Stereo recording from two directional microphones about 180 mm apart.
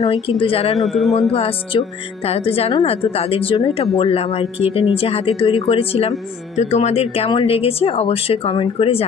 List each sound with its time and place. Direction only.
0.4 s speech: 30° left (ahead or behind)
0.7 s a man's voice: centre (ahead or behind)
1.3 s speech: 35° left (ahead or behind)